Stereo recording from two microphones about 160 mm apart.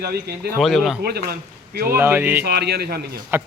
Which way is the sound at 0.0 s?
75° right (ahead or behind).